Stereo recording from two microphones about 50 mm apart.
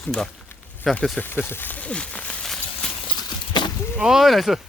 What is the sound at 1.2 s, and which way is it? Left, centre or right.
Speech, left.